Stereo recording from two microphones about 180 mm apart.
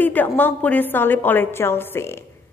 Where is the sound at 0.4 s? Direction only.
10° left (ahead or behind).